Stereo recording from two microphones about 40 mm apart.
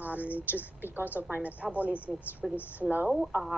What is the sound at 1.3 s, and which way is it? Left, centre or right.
Speech, right.